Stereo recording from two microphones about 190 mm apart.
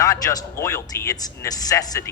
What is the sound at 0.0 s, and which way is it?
Speech, 15° left (ahead or behind).